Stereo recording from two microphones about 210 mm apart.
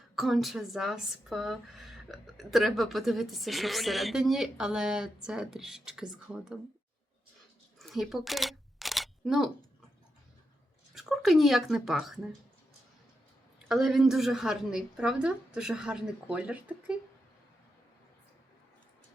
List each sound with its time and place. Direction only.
0.2 s speech: centre (ahead or behind)
7.8 s single-lens reflex camera: centre (ahead or behind)
10.9 s speech: centre (ahead or behind)
13.7 s speech: centre (ahead or behind)